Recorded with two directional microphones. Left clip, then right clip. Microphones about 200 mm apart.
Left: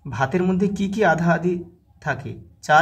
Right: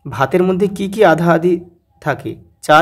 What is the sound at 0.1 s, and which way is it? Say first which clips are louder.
Speech: right 8 dB; 40° right (ahead or behind).